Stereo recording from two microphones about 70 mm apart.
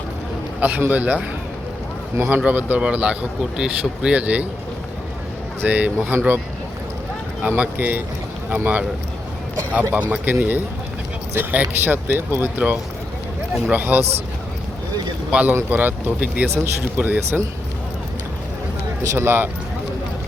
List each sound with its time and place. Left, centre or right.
0.6 s speech: right
5.6 s speech: right
7.4 s speech: right
9.9 s speech: right
15.3 s speech: centre
19.1 s speech: right